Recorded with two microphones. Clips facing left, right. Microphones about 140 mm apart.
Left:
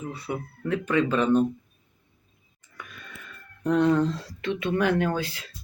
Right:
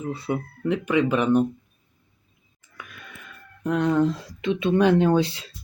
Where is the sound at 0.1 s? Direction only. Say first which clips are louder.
Right 5 dB; 20° right (ahead or behind).